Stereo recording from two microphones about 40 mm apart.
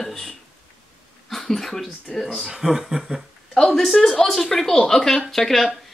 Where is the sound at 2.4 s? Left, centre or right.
Centre.